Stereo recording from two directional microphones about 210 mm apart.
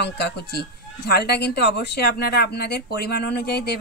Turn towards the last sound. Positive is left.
turn(degrees=50)  # may be behind; listen again after turning